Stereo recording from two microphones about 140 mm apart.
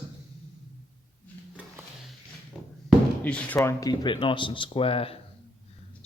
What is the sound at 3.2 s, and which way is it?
Speech, 10° left (ahead or behind).